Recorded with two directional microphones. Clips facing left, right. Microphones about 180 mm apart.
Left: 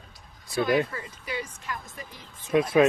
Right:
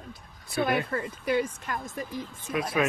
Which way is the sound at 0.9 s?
55° right (ahead or behind).